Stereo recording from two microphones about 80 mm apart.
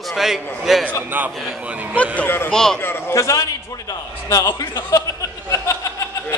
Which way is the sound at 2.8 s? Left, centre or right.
Left.